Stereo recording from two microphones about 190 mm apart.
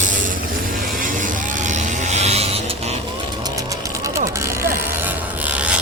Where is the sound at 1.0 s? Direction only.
45° right (ahead or behind).